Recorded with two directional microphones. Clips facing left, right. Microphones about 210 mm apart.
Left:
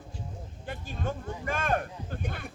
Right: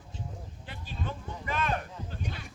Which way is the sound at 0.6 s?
50° left (ahead or behind).